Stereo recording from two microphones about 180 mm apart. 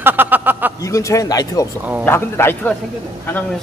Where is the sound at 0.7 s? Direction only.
15° left (ahead or behind).